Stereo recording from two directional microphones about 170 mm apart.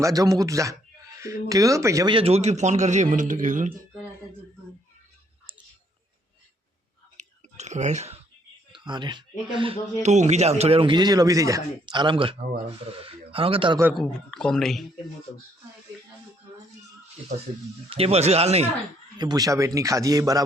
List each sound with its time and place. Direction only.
0.0 s speech: 20° right (ahead or behind)
2.1 s a man's voice: 35° right (ahead or behind)
7.2 s chewing: 40° right (ahead or behind)
8.7 s speech: 25° right (ahead or behind)
10.0 s speech: 45° right (ahead or behind)
13.9 s speech: 5° left (ahead or behind)
17.8 s speech: 35° right (ahead or behind)
19.1 s speech: 25° right (ahead or behind)